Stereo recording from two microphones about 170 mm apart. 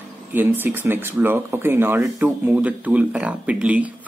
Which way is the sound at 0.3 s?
10° right (ahead or behind).